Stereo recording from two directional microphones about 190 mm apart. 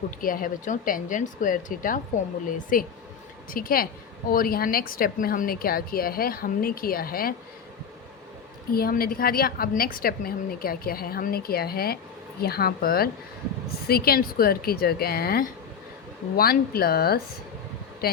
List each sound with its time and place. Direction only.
0.2 s a woman's voice: 45° left (ahead or behind)
8.7 s a woman's voice: 50° left (ahead or behind)